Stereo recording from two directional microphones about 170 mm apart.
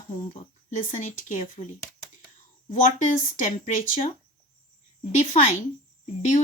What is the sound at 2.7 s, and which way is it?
Speech, 45° left (ahead or behind).